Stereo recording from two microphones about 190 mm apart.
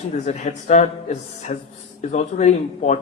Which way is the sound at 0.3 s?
35° left (ahead or behind).